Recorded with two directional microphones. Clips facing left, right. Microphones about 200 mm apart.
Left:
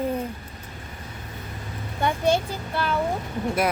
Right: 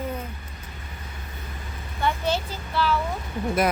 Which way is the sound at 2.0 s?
50° left (ahead or behind).